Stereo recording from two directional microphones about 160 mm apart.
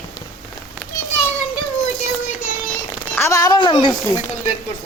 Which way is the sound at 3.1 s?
15° left (ahead or behind).